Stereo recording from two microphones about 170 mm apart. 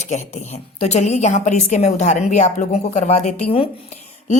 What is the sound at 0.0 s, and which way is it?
A woman's voice, 40° left (ahead or behind).